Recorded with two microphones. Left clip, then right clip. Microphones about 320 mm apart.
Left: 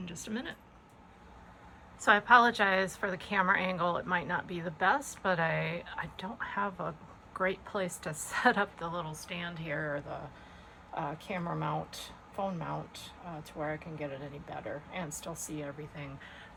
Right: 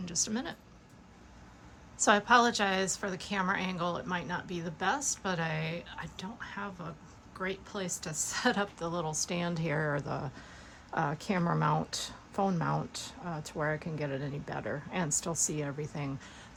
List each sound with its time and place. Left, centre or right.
0.0 s speech: centre
2.0 s a woman's voice: centre
4.9 s a woman's voice: right
5.2 s a woman's voice: centre; by 16.0 s right